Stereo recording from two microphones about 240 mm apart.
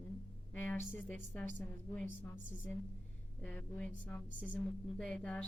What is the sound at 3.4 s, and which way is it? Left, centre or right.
Speech, centre.